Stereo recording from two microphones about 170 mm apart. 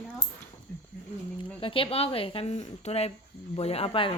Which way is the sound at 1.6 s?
30° left (ahead or behind).